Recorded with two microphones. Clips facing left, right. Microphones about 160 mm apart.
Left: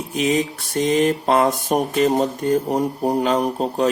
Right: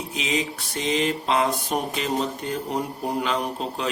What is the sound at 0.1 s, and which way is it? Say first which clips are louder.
Speech: left 8 dB; 50° left (ahead or behind).